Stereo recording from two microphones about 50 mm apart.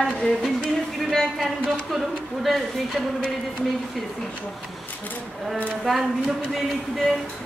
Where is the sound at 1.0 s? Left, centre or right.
Centre.